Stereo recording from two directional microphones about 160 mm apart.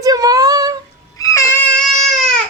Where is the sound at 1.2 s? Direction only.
20° left (ahead or behind).